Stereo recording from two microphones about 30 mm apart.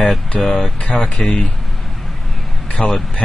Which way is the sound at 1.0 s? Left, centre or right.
Left.